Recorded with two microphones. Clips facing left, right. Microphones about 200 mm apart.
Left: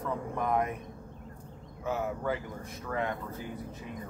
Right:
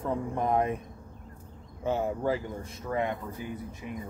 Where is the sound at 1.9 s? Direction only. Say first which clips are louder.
Right 4 dB; 30° right (ahead or behind).